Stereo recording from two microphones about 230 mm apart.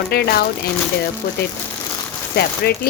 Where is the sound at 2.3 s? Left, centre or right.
Left.